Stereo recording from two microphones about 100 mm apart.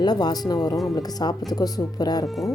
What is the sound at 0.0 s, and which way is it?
A woman's voice, 45° left (ahead or behind).